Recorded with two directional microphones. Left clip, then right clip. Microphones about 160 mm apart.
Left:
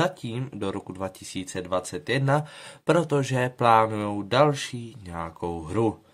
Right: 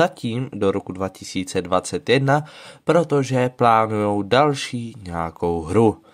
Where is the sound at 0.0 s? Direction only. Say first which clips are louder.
Right 7 dB; 35° right (ahead or behind).